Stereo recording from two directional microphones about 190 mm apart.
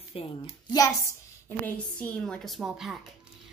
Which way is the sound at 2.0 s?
5° left (ahead or behind).